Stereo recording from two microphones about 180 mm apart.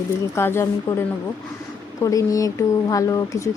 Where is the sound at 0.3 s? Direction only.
15° left (ahead or behind).